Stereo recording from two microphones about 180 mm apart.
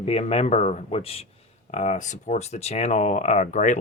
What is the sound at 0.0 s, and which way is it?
Speech, 35° left (ahead or behind).